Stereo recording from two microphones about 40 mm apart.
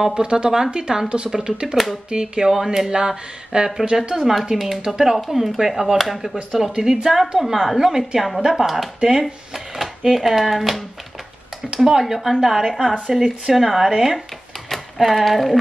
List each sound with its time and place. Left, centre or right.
0.1 s speech: right
2.5 s speech: centre
4.8 s speech: centre
5.1 s speech: centre
6.8 s speech: centre